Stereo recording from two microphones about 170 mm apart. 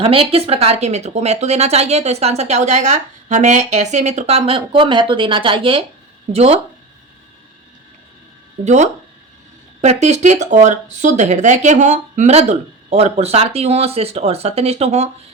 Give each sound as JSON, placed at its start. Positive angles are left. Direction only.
{"t": 0.0, "sound": "speech", "side_deg": -35}
{"t": 8.6, "sound": "speech", "side_deg": -45}